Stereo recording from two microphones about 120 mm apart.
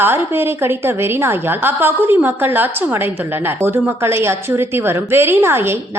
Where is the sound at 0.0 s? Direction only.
20° right (ahead or behind).